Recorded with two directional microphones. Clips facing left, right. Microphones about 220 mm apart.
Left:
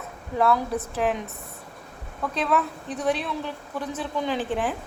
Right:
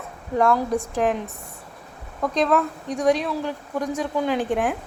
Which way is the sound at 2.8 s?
10° right (ahead or behind).